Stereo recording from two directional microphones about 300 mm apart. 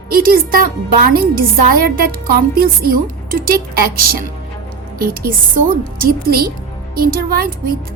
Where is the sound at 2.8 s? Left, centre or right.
Right.